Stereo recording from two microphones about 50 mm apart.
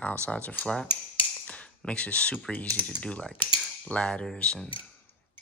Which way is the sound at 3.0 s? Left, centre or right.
Left.